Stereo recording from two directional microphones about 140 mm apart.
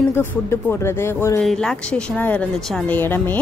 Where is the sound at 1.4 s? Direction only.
5° left (ahead or behind).